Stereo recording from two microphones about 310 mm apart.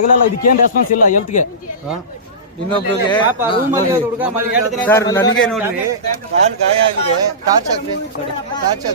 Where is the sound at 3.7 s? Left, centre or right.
Centre.